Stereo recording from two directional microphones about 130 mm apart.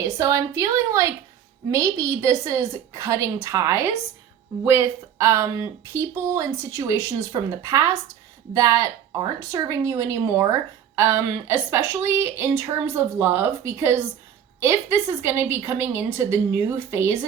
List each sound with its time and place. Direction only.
0.0 s a woman's voice: 25° right (ahead or behind)